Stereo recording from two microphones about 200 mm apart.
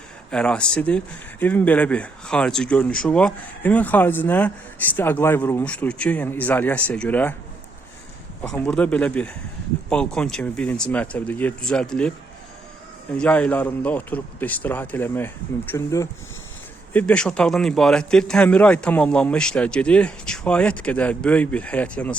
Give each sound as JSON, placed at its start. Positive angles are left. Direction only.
{"t": 0.3, "sound": "speech", "side_deg": 5}
{"t": 8.5, "sound": "a man's voice", "side_deg": 5}
{"t": 13.1, "sound": "a man's voice", "side_deg": 5}